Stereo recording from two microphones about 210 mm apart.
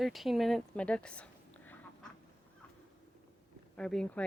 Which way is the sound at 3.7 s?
5° left (ahead or behind).